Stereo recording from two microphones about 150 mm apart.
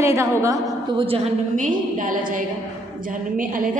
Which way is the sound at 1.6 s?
65° right (ahead or behind).